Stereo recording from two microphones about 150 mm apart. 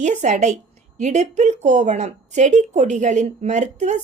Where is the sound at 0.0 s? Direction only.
55° right (ahead or behind).